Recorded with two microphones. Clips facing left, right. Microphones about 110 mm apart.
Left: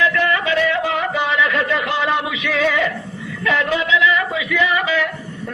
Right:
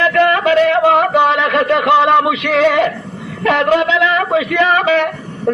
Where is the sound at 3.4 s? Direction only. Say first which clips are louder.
Right 7 dB; 65° right (ahead or behind).